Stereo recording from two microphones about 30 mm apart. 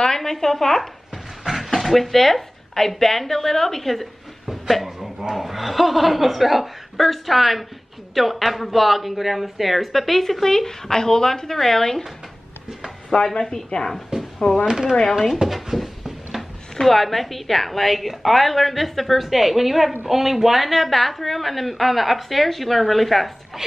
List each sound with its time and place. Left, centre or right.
0.0 s speech: centre
1.1 s a sound: centre
3.0 s a woman's voice: centre
4.5 s a sound: centre
5.3 s a woman's voice: centre
13.3 s a woman's voice: left
14.7 s speech: centre
16.8 s speech: centre